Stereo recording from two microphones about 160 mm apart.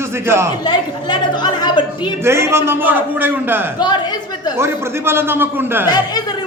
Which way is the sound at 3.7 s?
25° left (ahead or behind).